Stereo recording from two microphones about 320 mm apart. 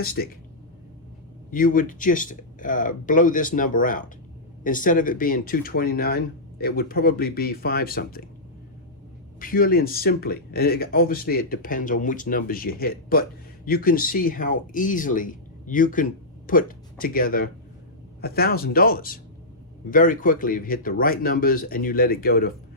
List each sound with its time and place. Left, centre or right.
0.0 s speech: left
1.5 s speech: left
9.4 s speech: left